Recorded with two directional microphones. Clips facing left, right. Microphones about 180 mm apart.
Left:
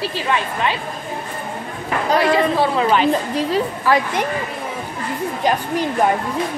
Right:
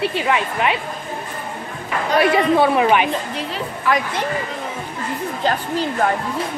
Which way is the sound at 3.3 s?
40° left (ahead or behind).